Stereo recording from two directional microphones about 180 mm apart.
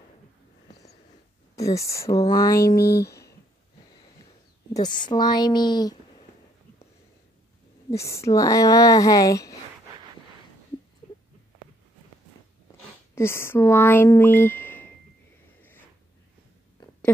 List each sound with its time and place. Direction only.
1.6 s speech: 15° left (ahead or behind)
4.8 s a woman's voice: 25° left (ahead or behind)
7.9 s speech: 15° left (ahead or behind)
13.1 s speech: 15° left (ahead or behind)